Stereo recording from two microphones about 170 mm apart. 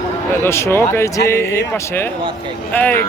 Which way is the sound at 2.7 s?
10° left (ahead or behind).